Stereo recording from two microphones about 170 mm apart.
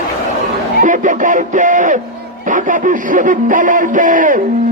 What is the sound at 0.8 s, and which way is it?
Music, 50° right (ahead or behind).